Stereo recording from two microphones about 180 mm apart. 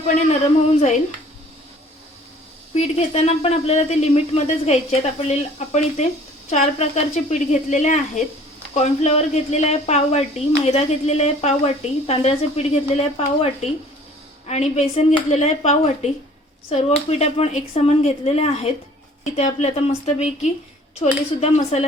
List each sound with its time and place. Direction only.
2.7 s speech: 35° left (ahead or behind)